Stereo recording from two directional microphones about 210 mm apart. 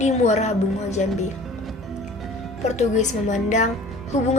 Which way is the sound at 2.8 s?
35° left (ahead or behind).